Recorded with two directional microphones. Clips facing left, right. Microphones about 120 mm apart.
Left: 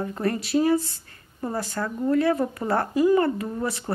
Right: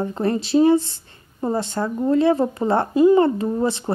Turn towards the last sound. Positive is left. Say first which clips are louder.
# right 7 dB
turn(degrees=-25)  # may be behind; listen again after turning